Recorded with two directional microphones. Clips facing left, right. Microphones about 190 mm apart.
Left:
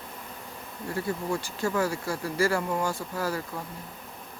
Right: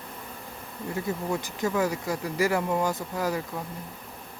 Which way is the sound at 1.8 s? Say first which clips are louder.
Right 2 dB; 15° right (ahead or behind).